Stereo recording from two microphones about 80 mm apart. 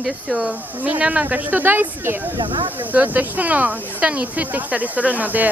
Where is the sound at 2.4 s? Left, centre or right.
Right.